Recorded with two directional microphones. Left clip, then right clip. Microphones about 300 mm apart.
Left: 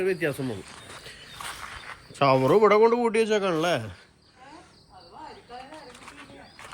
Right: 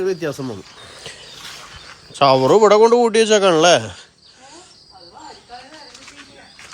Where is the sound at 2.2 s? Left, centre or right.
Centre.